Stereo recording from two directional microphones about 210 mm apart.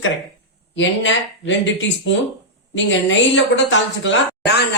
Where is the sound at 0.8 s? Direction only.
60° left (ahead or behind).